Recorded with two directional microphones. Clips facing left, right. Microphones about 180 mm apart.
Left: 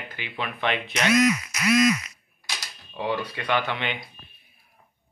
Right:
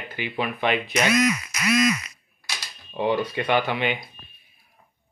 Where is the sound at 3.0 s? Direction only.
20° right (ahead or behind).